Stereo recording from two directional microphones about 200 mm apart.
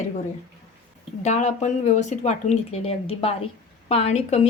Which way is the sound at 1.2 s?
35° left (ahead or behind).